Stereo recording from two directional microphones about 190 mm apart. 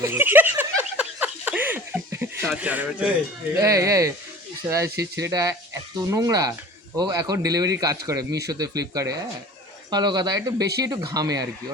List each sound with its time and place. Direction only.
0.0 s a sound: 10° right (ahead or behind)
3.5 s speech: 15° right (ahead or behind)
9.9 s speech: 20° right (ahead or behind)